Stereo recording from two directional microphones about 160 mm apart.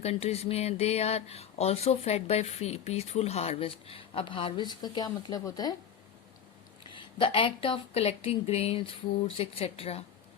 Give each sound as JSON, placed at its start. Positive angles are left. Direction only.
{"t": 0.0, "sound": "speech", "side_deg": 40}
{"t": 6.9, "sound": "speech", "side_deg": 30}